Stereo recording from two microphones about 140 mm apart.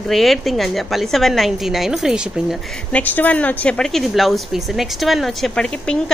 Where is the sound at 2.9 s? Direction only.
10° left (ahead or behind).